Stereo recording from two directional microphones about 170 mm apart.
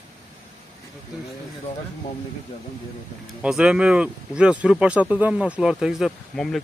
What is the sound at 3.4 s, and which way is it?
Speech, 5° right (ahead or behind).